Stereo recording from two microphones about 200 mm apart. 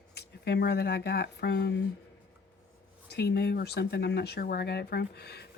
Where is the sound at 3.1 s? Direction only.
55° left (ahead or behind).